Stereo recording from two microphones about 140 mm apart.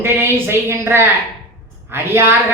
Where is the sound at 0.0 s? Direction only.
15° right (ahead or behind).